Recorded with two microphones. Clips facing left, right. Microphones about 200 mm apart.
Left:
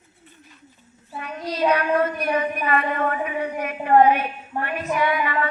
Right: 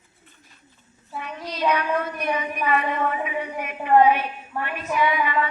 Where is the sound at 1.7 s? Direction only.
55° left (ahead or behind).